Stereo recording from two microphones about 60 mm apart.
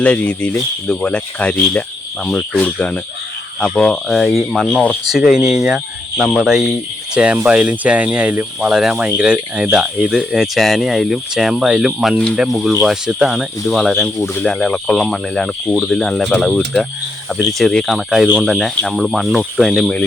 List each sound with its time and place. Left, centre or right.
0.0 s speech: centre
4.2 s speech: centre
7.1 s speech: centre
8.6 s speech: centre
14.4 s speech: centre
17.3 s speech: centre